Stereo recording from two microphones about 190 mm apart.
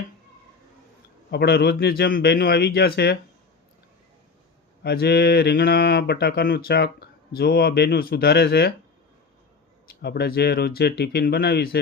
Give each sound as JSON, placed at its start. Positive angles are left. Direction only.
{"t": 1.3, "sound": "speech", "side_deg": 60}
{"t": 4.8, "sound": "speech", "side_deg": 60}
{"t": 10.0, "sound": "speech", "side_deg": 60}